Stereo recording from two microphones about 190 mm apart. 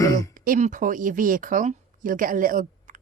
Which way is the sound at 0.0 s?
20° left (ahead or behind).